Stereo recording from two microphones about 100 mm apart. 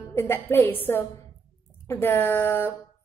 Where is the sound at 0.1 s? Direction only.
25° left (ahead or behind).